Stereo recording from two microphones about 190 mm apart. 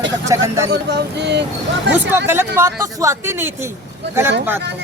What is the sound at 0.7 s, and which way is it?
Speech, 60° right (ahead or behind).